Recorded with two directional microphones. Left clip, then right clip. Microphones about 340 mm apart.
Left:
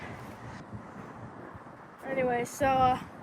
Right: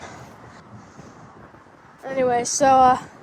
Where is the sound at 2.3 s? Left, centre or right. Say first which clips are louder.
Right 12 dB; right.